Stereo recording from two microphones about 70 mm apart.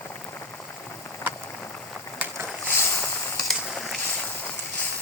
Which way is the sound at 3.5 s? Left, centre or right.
Centre.